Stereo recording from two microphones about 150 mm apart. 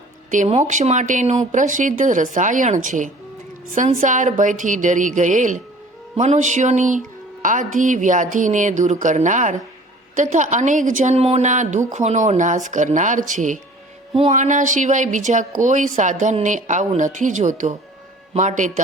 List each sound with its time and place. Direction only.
0.6 s speech: 55° right (ahead or behind)
6.1 s music: 50° right (ahead or behind)
7.4 s speech: 55° right (ahead or behind)